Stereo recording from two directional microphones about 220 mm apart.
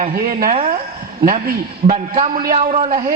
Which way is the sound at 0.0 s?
40° right (ahead or behind).